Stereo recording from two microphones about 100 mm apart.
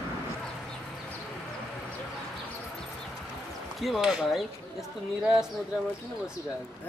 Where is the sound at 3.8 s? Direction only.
5° right (ahead or behind).